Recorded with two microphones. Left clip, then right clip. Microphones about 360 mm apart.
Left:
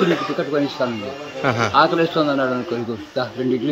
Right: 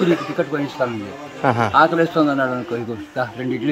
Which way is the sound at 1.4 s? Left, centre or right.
Centre.